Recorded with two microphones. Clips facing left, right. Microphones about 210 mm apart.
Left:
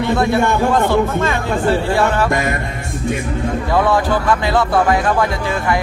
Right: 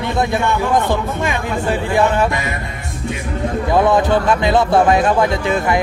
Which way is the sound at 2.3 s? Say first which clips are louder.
Left 4 dB; 50° left (ahead or behind).